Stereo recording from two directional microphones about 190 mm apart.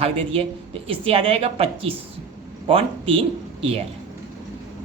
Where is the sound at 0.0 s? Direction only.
30° right (ahead or behind).